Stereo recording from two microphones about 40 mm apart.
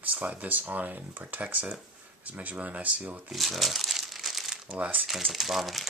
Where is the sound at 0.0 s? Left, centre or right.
Right.